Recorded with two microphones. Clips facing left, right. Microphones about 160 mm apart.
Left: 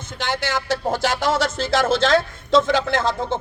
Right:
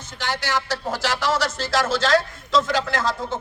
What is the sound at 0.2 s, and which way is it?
Speech, 55° left (ahead or behind).